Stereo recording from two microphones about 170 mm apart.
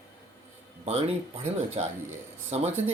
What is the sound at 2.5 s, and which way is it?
Speech, 40° right (ahead or behind).